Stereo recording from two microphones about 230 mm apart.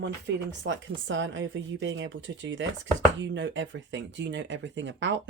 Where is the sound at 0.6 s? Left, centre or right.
Right.